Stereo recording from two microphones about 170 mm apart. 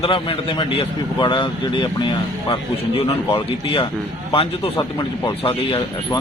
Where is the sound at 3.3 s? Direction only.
35° left (ahead or behind).